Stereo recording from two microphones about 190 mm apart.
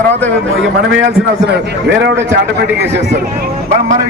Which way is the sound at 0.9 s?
55° right (ahead or behind).